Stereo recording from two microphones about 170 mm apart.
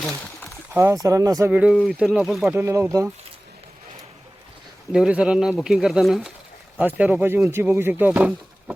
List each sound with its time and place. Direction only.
0.7 s speech: 15° right (ahead or behind)
1.7 s speech: 5° left (ahead or behind)
2.5 s speech: 15° right (ahead or behind)
4.9 s speech: 5° right (ahead or behind)